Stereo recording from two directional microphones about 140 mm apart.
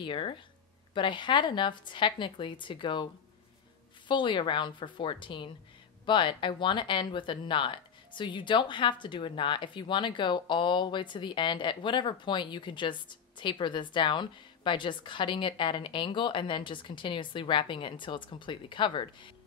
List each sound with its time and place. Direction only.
0.0 s speech: 35° left (ahead or behind)
4.1 s speech: 35° left (ahead or behind)